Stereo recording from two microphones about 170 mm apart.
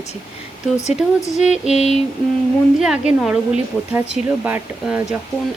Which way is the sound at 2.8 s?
5° right (ahead or behind).